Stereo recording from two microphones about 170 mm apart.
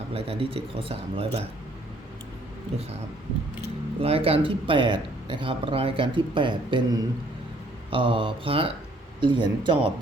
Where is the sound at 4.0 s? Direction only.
35° right (ahead or behind).